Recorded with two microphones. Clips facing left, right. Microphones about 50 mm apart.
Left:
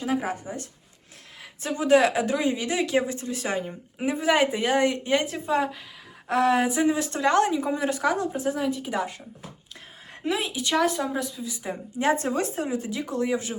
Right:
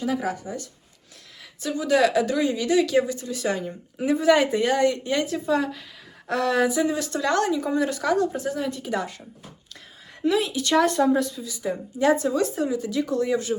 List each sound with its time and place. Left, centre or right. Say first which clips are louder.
0.0 s a woman's voice: right 1 dB; left
10.2 s a woman's voice: right 4 dB; left
10.8 s a woman's voice: right 5 dB; centre
11.4 s speech: right 4 dB; left
12.9 s speech: right 3 dB; left